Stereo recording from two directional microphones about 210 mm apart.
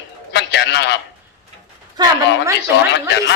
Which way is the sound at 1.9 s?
20° right (ahead or behind).